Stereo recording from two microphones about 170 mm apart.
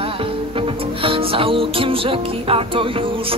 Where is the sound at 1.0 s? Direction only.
30° right (ahead or behind).